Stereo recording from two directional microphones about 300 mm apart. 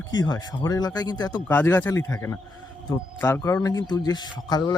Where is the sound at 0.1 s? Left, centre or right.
Centre.